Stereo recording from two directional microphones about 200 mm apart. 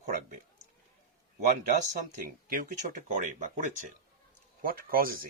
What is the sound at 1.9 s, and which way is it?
Speech, 40° right (ahead or behind).